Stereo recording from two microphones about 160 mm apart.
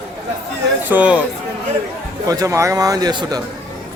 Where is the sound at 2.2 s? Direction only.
20° right (ahead or behind).